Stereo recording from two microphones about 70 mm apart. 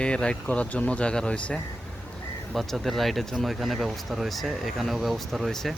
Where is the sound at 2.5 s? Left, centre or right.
Centre.